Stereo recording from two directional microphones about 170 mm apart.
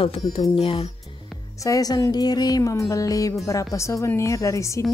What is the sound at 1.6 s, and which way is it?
Speech, 20° left (ahead or behind).